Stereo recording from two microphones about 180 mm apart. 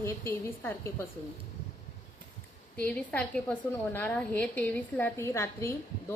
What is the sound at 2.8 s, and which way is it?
A woman's voice, 10° left (ahead or behind).